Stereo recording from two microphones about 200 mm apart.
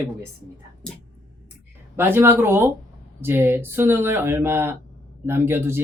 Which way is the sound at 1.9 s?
10° right (ahead or behind).